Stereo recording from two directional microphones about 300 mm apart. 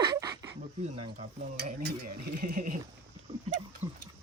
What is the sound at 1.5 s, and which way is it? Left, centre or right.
Stir, right.